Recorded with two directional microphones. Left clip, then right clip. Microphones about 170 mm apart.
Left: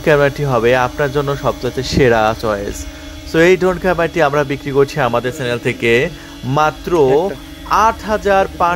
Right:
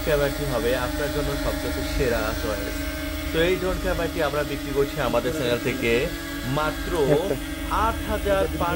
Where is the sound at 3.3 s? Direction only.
30° left (ahead or behind).